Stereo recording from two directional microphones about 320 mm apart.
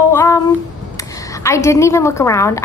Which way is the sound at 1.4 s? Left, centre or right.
Centre.